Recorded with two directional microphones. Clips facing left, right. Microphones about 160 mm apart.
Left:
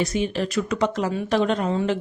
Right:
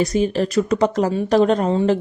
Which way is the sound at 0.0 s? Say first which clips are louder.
Right 5 dB; 40° right (ahead or behind).